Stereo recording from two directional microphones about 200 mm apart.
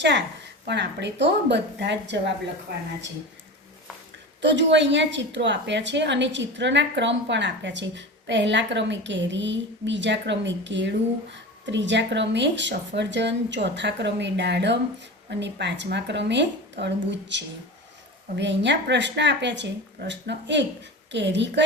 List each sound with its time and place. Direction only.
0.7 s a woman's voice: 60° right (ahead or behind)
4.4 s a woman's voice: 60° right (ahead or behind)